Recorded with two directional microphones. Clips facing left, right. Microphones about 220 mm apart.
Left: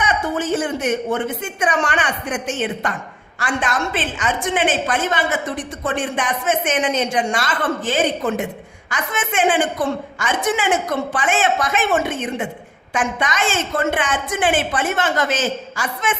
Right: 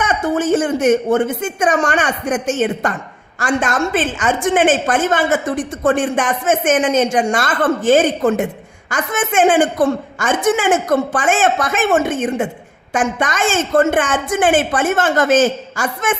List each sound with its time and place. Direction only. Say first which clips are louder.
0.0 s a woman's voice: right 4 dB; 50° right (ahead or behind)